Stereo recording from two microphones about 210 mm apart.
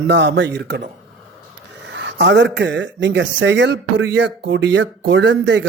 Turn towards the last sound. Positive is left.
turn(degrees=-60)  # may be behind; listen again after turning